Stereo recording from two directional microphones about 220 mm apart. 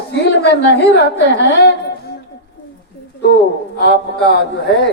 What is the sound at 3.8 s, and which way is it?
Speech, 50° left (ahead or behind).